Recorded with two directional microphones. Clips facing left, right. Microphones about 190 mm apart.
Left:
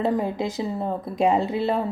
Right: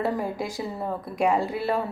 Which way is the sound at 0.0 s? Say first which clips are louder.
Left 4 dB; 20° left (ahead or behind).